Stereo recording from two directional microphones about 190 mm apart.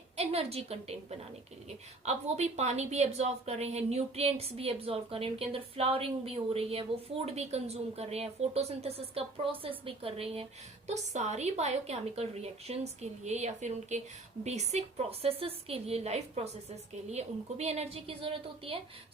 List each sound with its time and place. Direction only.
0.2 s a woman's voice: 30° right (ahead or behind)
2.0 s a woman's voice: 35° right (ahead or behind)